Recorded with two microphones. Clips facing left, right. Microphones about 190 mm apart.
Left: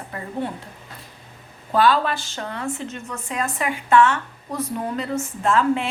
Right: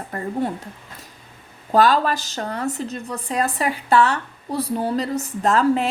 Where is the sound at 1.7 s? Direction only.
40° right (ahead or behind).